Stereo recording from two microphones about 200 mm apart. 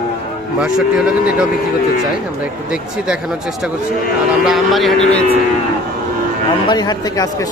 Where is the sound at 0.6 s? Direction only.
5° right (ahead or behind).